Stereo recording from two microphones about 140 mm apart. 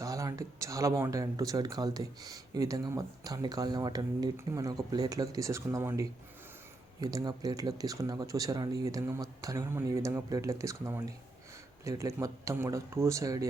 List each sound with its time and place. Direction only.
0.0 s speech: 25° right (ahead or behind)